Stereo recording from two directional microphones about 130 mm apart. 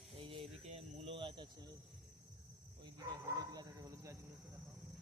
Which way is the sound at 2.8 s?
30° right (ahead or behind).